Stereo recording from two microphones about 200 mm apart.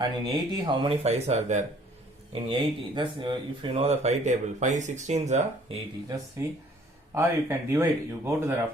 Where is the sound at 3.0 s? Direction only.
25° right (ahead or behind).